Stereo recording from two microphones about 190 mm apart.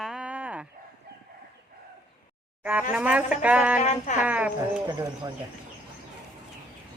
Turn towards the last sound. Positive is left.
turn(degrees=-20)  # may be behind; listen again after turning